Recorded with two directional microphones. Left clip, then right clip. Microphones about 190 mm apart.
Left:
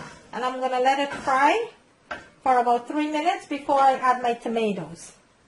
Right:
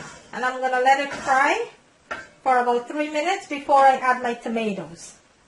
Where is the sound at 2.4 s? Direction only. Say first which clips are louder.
Right 1 dB; 65° left (ahead or behind).